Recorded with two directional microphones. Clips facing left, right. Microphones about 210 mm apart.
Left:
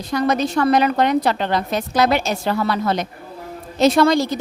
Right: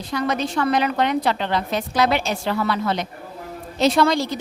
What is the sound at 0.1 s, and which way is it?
A woman's voice, 40° left (ahead or behind).